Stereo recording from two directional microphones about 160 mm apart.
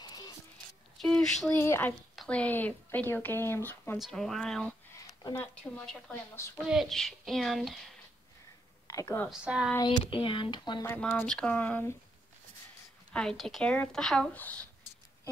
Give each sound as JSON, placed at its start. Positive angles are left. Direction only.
{"t": 0.0, "sound": "music", "side_deg": 25}
{"t": 0.9, "sound": "speech", "side_deg": 5}
{"t": 1.5, "sound": "speech", "side_deg": 15}
{"t": 4.0, "sound": "speech", "side_deg": 5}
{"t": 5.0, "sound": "speech", "side_deg": 15}
{"t": 6.3, "sound": "speech", "side_deg": 15}
{"t": 6.7, "sound": "speech", "side_deg": 0}
{"t": 8.8, "sound": "a woman's voice", "side_deg": 20}
{"t": 9.3, "sound": "speech", "side_deg": -5}
{"t": 9.8, "sound": "a sound", "side_deg": 30}
{"t": 10.9, "sound": "speech", "side_deg": 10}
{"t": 13.1, "sound": "speech", "side_deg": 5}